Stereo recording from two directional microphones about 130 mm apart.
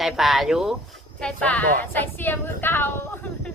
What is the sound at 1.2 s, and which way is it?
A woman's voice, 10° left (ahead or behind).